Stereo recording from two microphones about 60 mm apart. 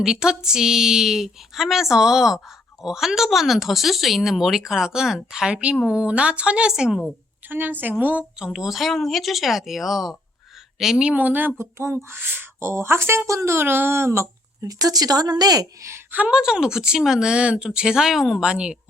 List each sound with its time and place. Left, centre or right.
0.0 s a woman's voice: centre
7.4 s a woman's voice: right
8.5 s a woman's voice: centre
11.1 s a woman's voice: right
11.5 s speech: right
12.5 s speech: right
14.7 s a woman's voice: right
16.1 s a woman's voice: centre
18.4 s a woman's voice: centre